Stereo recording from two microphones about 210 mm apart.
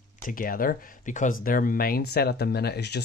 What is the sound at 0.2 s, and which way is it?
Speech, 40° left (ahead or behind).